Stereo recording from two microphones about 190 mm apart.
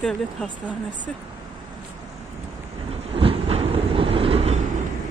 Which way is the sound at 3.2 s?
30° right (ahead or behind).